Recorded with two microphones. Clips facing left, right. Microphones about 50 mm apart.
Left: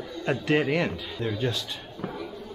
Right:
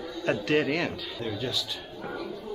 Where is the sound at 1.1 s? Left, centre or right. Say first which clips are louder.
Left 5 dB; left.